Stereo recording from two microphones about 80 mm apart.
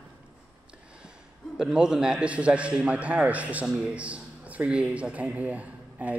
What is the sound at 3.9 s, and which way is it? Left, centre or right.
Speech, centre.